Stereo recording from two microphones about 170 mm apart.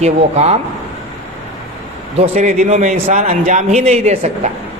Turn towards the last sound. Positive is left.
turn(degrees=-40)  # may be behind; listen again after turning